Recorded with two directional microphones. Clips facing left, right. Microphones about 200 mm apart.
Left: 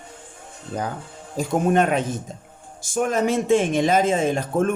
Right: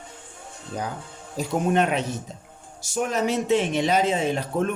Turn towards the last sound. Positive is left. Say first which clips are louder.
# left 3 dB
turn(degrees=45)  # may be behind; listen again after turning